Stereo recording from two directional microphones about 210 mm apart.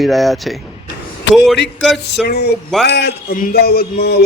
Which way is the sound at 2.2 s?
50° left (ahead or behind).